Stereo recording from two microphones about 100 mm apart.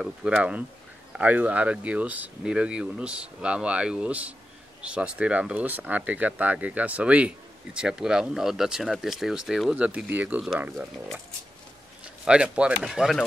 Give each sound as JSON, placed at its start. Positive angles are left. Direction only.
{"t": 0.3, "sound": "speech", "side_deg": -15}